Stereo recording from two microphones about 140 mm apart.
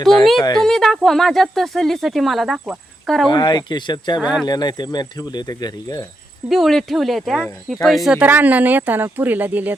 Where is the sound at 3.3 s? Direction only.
30° left (ahead or behind).